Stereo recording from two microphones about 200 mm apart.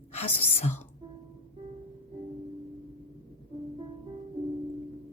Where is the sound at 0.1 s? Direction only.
30° left (ahead or behind).